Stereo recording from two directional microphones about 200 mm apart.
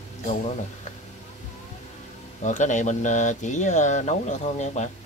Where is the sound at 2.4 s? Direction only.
40° left (ahead or behind).